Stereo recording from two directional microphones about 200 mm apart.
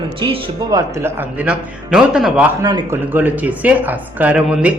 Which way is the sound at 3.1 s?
10° right (ahead or behind).